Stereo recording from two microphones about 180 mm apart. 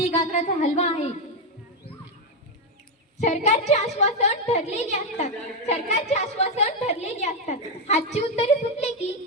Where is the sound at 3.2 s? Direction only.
40° left (ahead or behind).